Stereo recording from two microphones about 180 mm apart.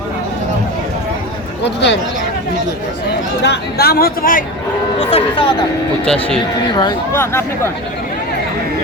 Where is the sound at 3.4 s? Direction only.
65° left (ahead or behind).